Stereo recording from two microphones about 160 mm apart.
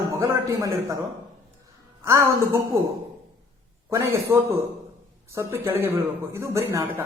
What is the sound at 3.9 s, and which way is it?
A woman's voice, 15° right (ahead or behind).